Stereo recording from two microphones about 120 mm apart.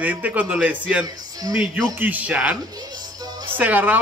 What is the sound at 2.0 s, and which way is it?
Speech, 15° right (ahead or behind).